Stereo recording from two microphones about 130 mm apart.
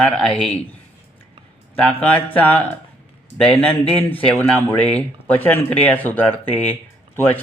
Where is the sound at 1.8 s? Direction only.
10° left (ahead or behind).